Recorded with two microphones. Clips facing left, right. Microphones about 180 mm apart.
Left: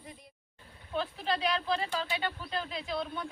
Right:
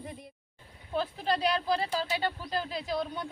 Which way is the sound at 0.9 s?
40° right (ahead or behind).